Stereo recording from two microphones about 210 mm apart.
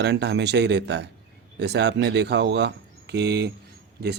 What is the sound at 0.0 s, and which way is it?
A man's voice, 55° right (ahead or behind).